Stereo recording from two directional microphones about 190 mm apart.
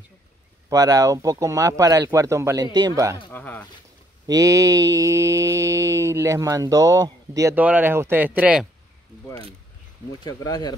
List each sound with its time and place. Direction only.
0.7 s mantra: 20° right (ahead or behind)
3.3 s speech: 10° left (ahead or behind)
4.3 s mantra: 15° right (ahead or behind)
10.2 s speech: 20° left (ahead or behind)